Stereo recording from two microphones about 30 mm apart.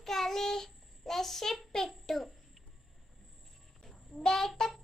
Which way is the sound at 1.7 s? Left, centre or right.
Centre.